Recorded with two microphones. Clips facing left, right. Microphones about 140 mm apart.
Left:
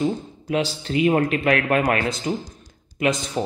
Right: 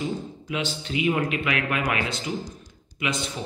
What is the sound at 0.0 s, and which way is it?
A man's voice, 40° left (ahead or behind).